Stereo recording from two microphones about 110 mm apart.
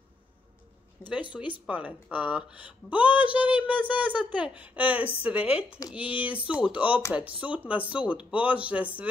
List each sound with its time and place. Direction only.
1.0 s speech: 25° left (ahead or behind)
1.3 s speech: 15° right (ahead or behind)